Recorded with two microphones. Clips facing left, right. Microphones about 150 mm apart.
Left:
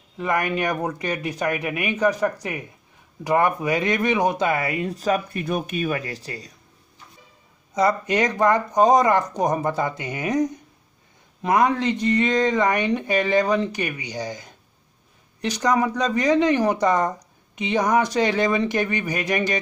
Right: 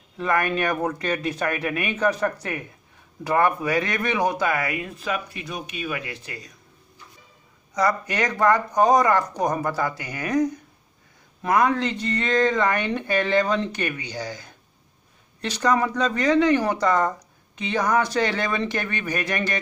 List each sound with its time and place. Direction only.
0.2 s speech: 15° left (ahead or behind); by 6.5 s 35° left (ahead or behind)
7.7 s speech: 20° left (ahead or behind)